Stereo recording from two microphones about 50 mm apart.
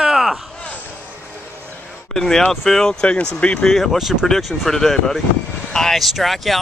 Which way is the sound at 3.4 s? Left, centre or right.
Left.